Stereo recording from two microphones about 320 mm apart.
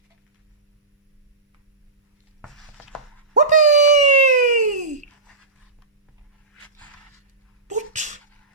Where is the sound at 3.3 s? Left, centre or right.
Right.